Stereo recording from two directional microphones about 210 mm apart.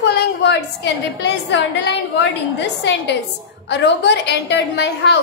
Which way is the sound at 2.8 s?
55° left (ahead or behind).